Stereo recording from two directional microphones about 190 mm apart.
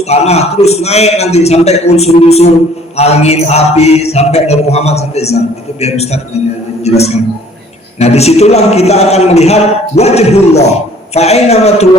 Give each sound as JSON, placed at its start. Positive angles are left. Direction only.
{"t": 0.0, "sound": "a man's voice", "side_deg": 35}